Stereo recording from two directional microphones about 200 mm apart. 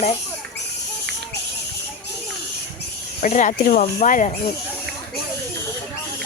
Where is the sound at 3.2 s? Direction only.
40° left (ahead or behind).